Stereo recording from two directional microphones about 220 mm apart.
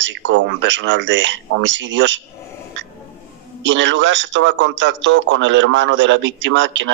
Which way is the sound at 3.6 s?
55° right (ahead or behind).